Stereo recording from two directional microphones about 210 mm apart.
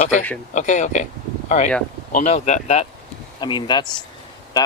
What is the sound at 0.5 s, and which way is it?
Speech, 35° left (ahead or behind).